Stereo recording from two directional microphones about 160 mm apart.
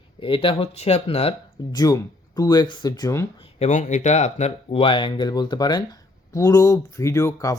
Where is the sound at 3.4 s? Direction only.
45° left (ahead or behind).